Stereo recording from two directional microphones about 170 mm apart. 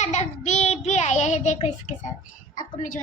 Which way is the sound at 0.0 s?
45° left (ahead or behind).